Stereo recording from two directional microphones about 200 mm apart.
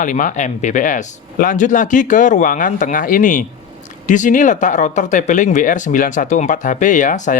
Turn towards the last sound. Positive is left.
turn(degrees=40)  # may be behind; listen again after turning